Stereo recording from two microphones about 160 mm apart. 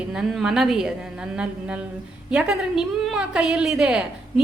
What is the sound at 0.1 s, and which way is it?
A woman's voice, centre (ahead or behind).